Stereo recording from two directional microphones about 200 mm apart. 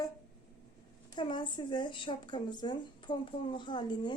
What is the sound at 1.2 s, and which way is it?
A woman's voice, 25° left (ahead or behind).